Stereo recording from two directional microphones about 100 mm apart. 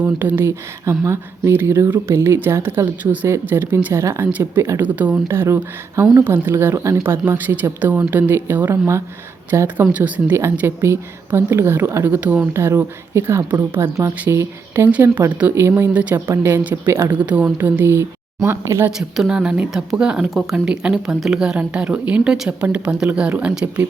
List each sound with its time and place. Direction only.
0.0 s speech: 20° right (ahead or behind)
4.3 s speech: 15° right (ahead or behind)
15.5 s speech: 25° right (ahead or behind)
15.9 s speech: 15° right (ahead or behind)
18.9 s speech: 5° right (ahead or behind)